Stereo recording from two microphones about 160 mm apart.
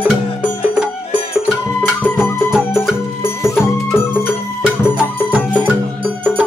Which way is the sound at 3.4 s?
15° left (ahead or behind).